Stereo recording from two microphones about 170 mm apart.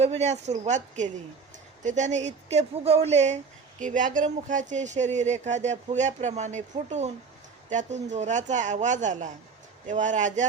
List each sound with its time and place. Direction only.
0.0 s speech: 40° right (ahead or behind)